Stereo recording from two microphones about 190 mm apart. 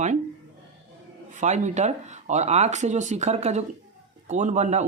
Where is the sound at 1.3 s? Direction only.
40° right (ahead or behind).